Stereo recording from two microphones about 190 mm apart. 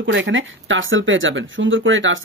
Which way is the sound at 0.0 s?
80° right.